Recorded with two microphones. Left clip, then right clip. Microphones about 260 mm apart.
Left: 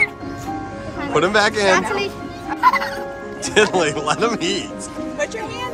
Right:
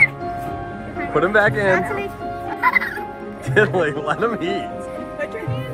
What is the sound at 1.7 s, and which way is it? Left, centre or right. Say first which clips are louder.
Speech: left 2 dB; left.